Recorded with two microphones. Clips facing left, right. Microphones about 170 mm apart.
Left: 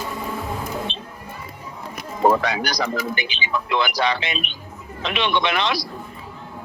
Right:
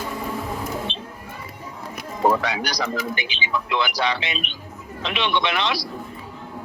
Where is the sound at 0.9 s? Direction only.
50° left (ahead or behind).